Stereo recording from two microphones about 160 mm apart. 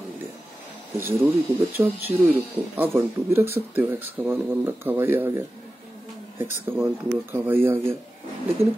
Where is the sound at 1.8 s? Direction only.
15° right (ahead or behind).